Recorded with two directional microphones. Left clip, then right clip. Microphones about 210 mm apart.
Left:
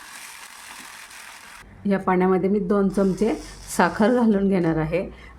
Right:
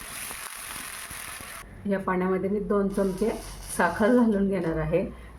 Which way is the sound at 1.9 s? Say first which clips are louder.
Left 6 dB; 50° left (ahead or behind).